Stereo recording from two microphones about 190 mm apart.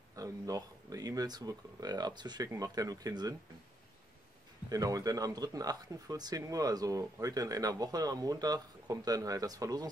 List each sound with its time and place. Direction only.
0.1 s speech: 20° right (ahead or behind)
4.6 s speech: 20° right (ahead or behind)